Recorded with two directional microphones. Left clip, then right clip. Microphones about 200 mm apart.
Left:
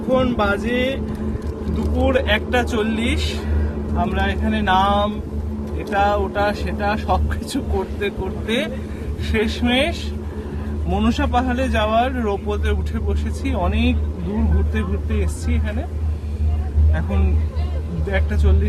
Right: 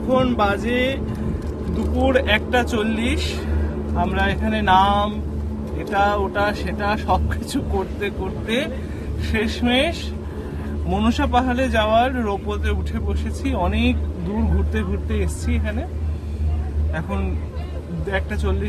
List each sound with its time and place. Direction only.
0.1 s speech: 10° right (ahead or behind)
16.9 s speech: 15° right (ahead or behind)